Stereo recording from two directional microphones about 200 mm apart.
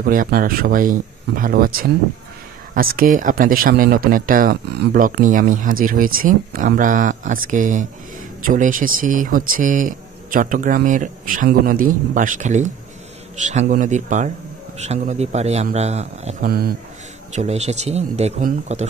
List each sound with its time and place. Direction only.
0.0 s speech: 45° right (ahead or behind)
16.4 s speech: 50° right (ahead or behind)
17.3 s speech: 35° right (ahead or behind)